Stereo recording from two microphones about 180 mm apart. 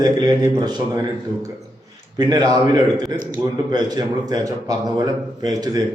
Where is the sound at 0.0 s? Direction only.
25° right (ahead or behind).